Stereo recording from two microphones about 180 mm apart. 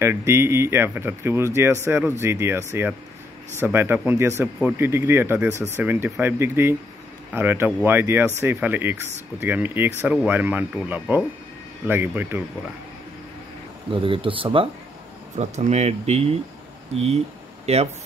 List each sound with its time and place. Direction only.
0.0 s speech: 15° right (ahead or behind)
13.9 s speech: 30° right (ahead or behind)
15.3 s speech: 40° right (ahead or behind)